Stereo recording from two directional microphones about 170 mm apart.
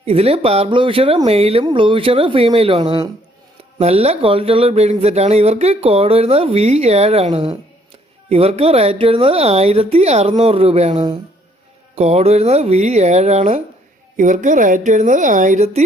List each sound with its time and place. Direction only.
0.0 s speech: 35° right (ahead or behind)